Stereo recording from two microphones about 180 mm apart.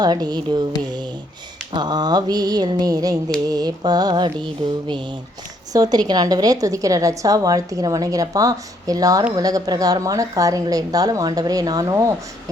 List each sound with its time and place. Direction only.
0.0 s a woman's voice: 20° right (ahead or behind)